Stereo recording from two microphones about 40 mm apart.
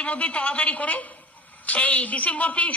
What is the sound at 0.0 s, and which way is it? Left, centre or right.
A woman's voice, left.